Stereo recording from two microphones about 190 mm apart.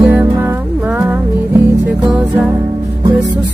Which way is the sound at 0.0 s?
10° right (ahead or behind).